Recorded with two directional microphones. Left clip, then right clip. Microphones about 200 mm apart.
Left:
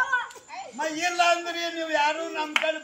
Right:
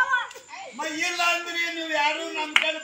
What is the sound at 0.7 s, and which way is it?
A man's voice, centre (ahead or behind).